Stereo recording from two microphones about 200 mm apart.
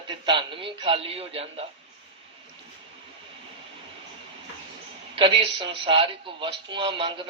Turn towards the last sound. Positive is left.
turn(degrees=-25)  # may be behind; listen again after turning